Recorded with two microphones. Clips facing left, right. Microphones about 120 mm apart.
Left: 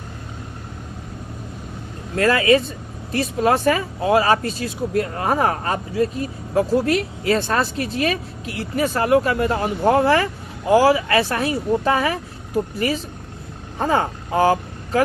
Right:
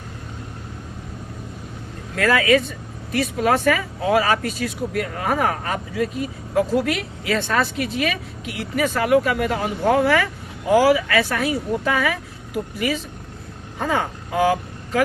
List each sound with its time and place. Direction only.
2.1 s speech: 35° left (ahead or behind)
13.7 s speech: 35° left (ahead or behind)